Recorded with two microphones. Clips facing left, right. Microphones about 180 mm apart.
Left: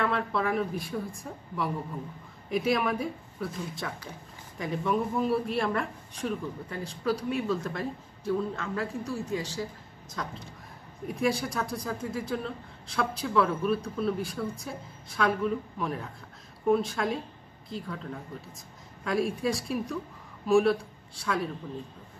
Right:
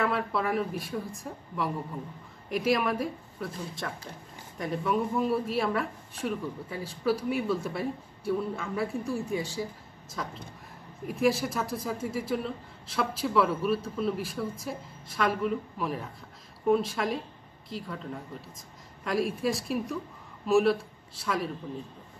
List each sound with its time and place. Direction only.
0.0 s speech: 5° right (ahead or behind)
10.2 s speech: 5° right (ahead or behind)